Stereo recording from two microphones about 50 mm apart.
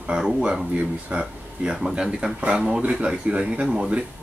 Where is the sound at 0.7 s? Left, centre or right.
Right.